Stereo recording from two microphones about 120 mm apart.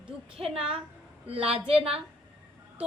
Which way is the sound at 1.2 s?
55° right (ahead or behind).